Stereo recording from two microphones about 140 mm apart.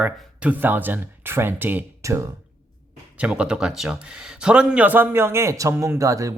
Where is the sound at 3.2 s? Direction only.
10° right (ahead or behind).